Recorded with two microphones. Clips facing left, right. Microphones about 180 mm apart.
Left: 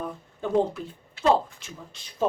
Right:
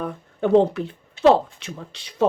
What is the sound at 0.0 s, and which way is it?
Speech, 70° right (ahead or behind).